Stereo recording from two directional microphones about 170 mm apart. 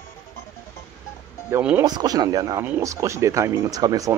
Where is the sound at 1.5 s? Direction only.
5° right (ahead or behind).